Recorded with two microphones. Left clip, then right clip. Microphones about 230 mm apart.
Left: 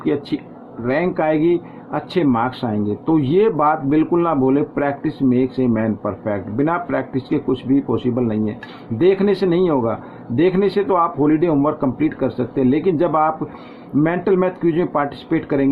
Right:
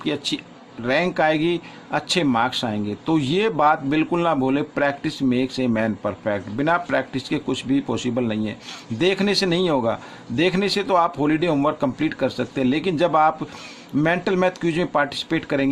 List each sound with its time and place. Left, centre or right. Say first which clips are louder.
0.0 s a man's voice: left 4 dB; right